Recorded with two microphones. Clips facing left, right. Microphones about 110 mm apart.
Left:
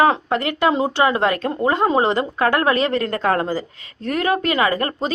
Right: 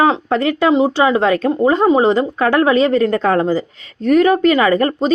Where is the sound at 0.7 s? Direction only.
20° right (ahead or behind).